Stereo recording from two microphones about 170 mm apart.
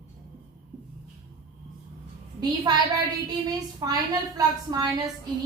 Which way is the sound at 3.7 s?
20° right (ahead or behind).